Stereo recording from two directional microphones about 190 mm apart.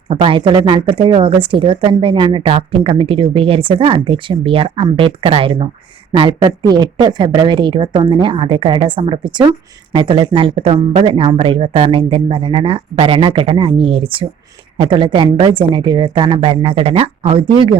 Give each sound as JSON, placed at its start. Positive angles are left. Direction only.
{"t": 0.1, "sound": "speech", "side_deg": -30}